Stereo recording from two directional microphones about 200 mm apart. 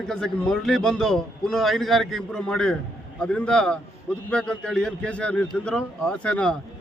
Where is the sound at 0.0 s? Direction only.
5° left (ahead or behind).